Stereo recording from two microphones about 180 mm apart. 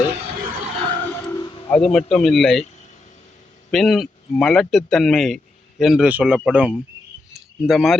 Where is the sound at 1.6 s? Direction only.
5° left (ahead or behind).